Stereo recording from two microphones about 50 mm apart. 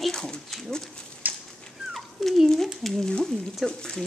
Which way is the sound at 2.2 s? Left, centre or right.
Centre.